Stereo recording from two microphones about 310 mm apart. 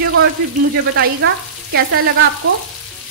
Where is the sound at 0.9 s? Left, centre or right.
Right.